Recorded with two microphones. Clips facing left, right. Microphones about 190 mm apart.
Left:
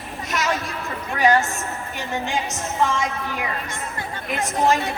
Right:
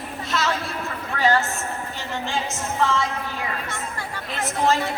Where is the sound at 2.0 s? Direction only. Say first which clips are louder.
Left 3 dB; 15° left (ahead or behind).